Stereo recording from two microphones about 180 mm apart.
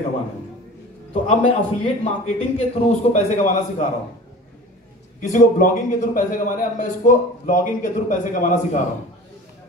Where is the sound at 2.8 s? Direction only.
40° left (ahead or behind).